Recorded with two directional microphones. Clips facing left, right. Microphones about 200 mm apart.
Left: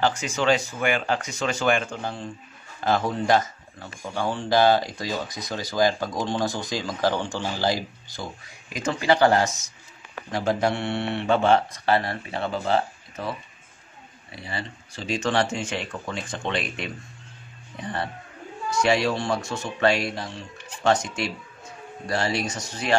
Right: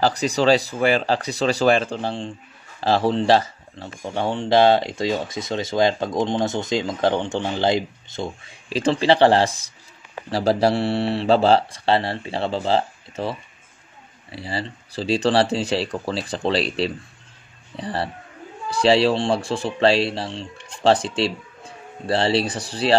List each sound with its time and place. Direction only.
0.0 s speech: 35° right (ahead or behind)